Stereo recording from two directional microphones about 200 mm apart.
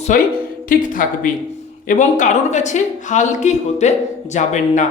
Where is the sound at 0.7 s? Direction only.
40° left (ahead or behind).